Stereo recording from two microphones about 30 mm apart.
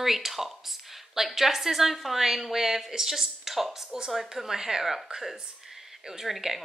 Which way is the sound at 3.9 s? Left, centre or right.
Right.